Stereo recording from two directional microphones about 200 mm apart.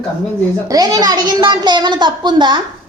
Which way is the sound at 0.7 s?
20° right (ahead or behind).